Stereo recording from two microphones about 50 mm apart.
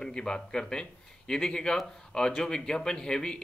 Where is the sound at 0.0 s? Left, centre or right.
Centre.